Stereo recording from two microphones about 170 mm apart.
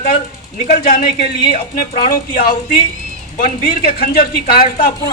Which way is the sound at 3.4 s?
60° left (ahead or behind).